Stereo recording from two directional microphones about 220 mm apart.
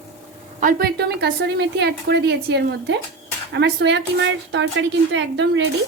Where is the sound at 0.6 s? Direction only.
40° right (ahead or behind); by 5.6 s 55° right (ahead or behind).